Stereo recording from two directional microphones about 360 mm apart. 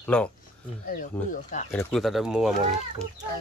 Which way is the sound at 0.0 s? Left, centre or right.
Centre.